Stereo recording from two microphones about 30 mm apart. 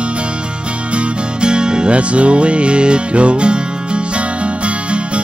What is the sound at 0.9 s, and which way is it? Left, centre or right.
Music, right.